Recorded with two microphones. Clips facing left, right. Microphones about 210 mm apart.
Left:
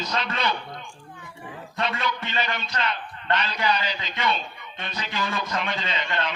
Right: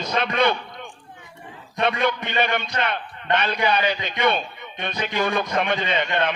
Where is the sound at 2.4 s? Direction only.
55° right (ahead or behind).